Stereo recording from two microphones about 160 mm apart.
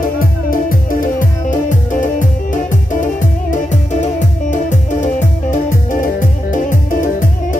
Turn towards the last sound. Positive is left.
turn(degrees=55)  # may be behind; listen again after turning